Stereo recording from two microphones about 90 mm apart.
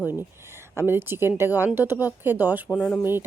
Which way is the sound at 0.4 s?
30° right (ahead or behind).